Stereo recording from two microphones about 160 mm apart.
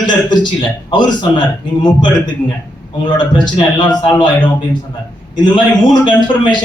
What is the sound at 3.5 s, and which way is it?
Speech, 30° left (ahead or behind).